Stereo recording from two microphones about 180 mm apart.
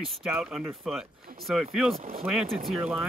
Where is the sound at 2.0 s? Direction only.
40° right (ahead or behind).